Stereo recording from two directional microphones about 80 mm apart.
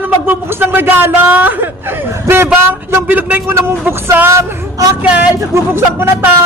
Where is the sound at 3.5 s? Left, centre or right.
Right.